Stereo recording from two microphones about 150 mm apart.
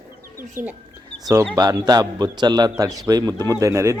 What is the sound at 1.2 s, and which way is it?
A man's voice, 20° right (ahead or behind).